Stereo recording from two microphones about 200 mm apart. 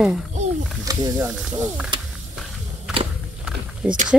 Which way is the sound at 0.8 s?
20° right (ahead or behind).